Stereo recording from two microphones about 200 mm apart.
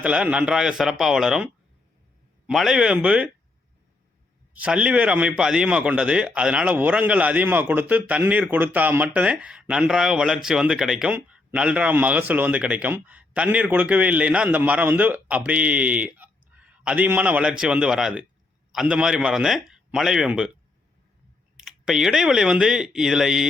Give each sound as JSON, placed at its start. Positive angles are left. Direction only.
{"t": 0.0, "sound": "a man's voice", "side_deg": -5}
{"t": 2.5, "sound": "a man's voice", "side_deg": 0}
{"t": 4.5, "sound": "a man's voice", "side_deg": -5}
{"t": 21.5, "sound": "a man's voice", "side_deg": 0}